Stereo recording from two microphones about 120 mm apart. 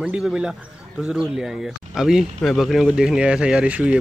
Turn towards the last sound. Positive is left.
turn(degrees=-10)  # may be behind; listen again after turning